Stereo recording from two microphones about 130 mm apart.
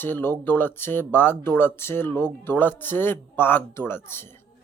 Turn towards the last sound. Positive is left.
turn(degrees=15)  # may be behind; listen again after turning